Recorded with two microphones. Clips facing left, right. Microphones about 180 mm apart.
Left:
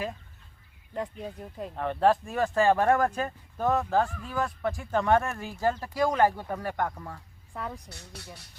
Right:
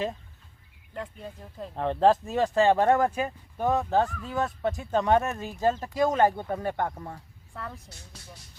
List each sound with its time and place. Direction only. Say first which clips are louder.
1.2 s speech: left 2 dB; 15° left (ahead or behind)
1.7 s speech: right 2 dB; 30° right (ahead or behind)
7.5 s a woman's voice: left 3 dB; 15° left (ahead or behind)
7.9 s speech: left 4 dB; 65° left (ahead or behind)